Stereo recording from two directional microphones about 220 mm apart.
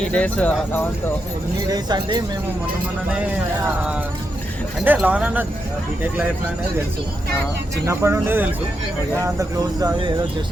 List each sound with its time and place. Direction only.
0.0 s speech: 5° left (ahead or behind)
1.6 s speech: 20° right (ahead or behind)
4.9 s speech: 5° right (ahead or behind)
7.9 s speech: 10° right (ahead or behind)